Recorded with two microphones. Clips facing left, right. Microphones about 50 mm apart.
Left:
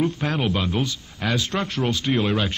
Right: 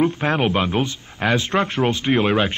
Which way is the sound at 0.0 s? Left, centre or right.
Right.